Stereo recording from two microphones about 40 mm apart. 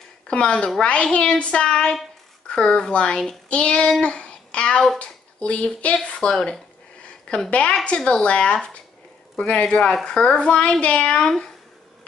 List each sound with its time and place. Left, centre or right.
0.3 s a child's voice: left
3.4 s child singing: left
4.0 s babbling: left
4.9 s speech: left
6.0 s a child's voice: left
6.3 s speech: centre
7.3 s a woman's voice: left
11.2 s speech: centre